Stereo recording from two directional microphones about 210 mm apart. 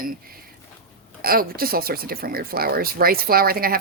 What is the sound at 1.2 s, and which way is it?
Speech, 45° right (ahead or behind).